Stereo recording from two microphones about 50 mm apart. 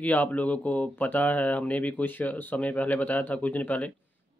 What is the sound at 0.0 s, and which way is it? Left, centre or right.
Speech, left.